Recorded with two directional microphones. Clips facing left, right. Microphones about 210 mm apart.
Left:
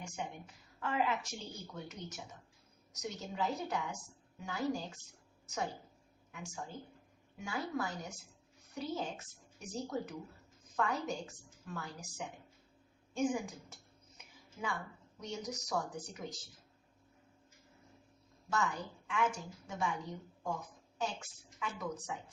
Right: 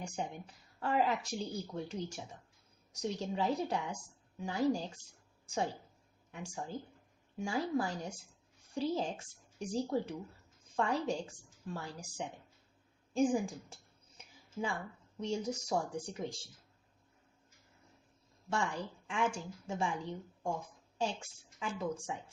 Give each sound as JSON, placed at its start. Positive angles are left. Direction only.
{"t": 0.0, "sound": "speech", "side_deg": -35}
{"t": 6.3, "sound": "a woman's voice", "side_deg": -30}
{"t": 15.2, "sound": "a woman's voice", "side_deg": -30}
{"t": 18.5, "sound": "a woman's voice", "side_deg": -30}